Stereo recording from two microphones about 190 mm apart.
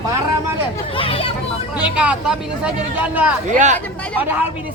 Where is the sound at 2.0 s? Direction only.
5° right (ahead or behind).